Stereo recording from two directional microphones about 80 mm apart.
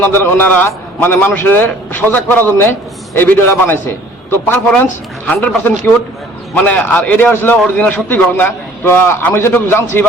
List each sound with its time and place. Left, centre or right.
0.0 s a man's voice: left